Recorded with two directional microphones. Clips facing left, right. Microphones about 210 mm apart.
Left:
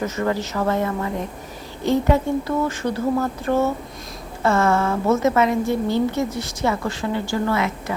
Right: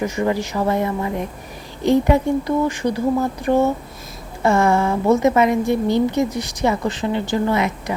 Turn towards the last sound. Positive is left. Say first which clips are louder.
# right 2 dB
turn(degrees=-20)  # may be behind; listen again after turning